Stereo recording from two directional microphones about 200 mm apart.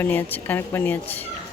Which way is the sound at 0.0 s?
10° left (ahead or behind).